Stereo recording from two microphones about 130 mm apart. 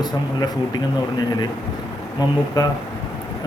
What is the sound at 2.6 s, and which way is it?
Speech, 30° left (ahead or behind).